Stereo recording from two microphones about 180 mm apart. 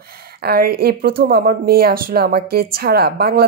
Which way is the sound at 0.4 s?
60° right (ahead or behind).